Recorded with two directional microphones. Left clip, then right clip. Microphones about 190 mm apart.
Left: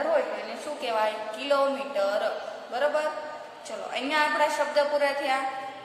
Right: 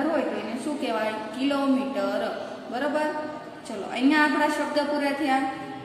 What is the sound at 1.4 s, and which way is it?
A woman's voice, 10° left (ahead or behind).